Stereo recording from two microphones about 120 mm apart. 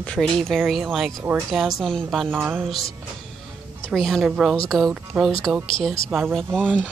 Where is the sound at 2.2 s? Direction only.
15° right (ahead or behind).